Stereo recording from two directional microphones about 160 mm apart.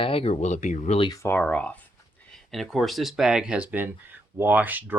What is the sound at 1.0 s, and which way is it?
Speech, 25° left (ahead or behind).